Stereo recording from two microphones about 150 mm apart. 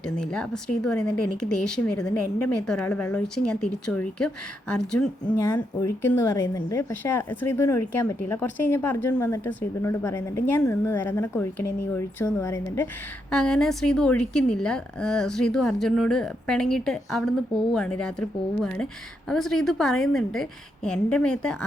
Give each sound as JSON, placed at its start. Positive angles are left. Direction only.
{"t": 0.2, "sound": "a woman's voice", "side_deg": 5}
{"t": 5.4, "sound": "speech", "side_deg": 15}
{"t": 13.3, "sound": "a woman's voice", "side_deg": 5}